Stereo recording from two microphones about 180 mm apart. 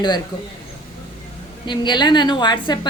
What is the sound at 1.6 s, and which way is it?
Speech, 25° left (ahead or behind).